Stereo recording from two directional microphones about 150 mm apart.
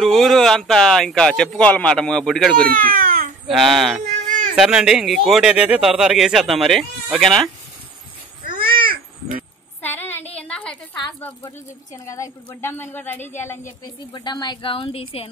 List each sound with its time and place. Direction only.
0.0 s speech: centre (ahead or behind)
2.8 s speech: 75° right (ahead or behind)
3.5 s speech: centre (ahead or behind)
4.0 s a sound: 60° right (ahead or behind)
4.6 s speech: 5° right (ahead or behind)
8.5 s babbling: 75° right (ahead or behind)
9.8 s a sound: 15° left (ahead or behind)
11.4 s speech: 20° left (ahead or behind)
14.2 s a woman's voice: 30° left (ahead or behind)